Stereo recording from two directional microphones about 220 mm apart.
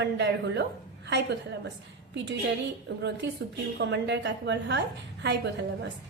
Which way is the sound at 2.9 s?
55° right (ahead or behind).